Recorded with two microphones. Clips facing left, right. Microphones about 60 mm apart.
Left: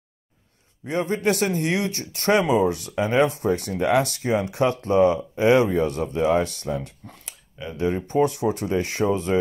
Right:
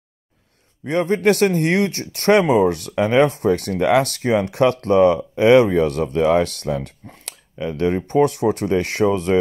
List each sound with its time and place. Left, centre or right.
0.8 s speech: right